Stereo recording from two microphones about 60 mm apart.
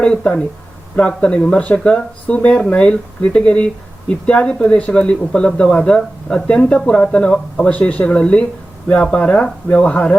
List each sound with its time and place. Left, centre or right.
0.0 s speech: centre